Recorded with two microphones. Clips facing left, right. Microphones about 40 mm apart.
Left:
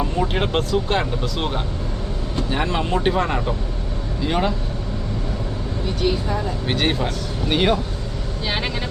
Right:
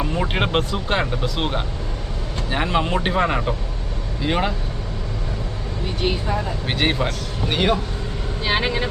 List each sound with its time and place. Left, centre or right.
0.0 s speech: right
6.0 s speech: right
6.3 s speech: centre